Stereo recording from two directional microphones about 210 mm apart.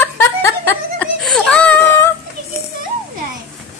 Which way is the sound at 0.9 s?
5° left (ahead or behind).